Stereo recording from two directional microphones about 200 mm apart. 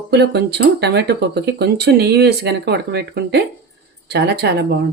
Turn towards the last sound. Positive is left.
turn(degrees=-55)  # may be behind; listen again after turning